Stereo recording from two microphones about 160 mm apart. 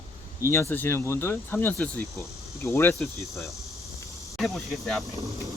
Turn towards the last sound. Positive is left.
turn(degrees=0)  # may be behind; listen again after turning